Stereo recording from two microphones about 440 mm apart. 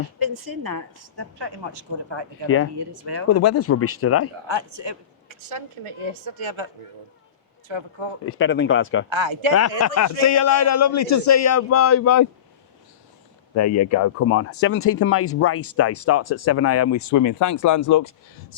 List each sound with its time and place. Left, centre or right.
0.2 s a woman's voice: right
2.7 s speech: right
3.2 s speech: left
4.4 s a man's voice: right
5.5 s speech: right
7.7 s speech: right
8.2 s speech: left
9.0 s speech: right
9.5 s speech: left
13.5 s speech: left